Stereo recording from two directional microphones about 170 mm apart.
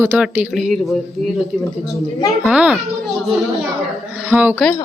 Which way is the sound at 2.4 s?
5° right (ahead or behind).